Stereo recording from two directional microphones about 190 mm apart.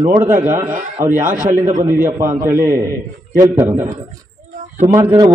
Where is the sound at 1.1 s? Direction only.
45° right (ahead or behind).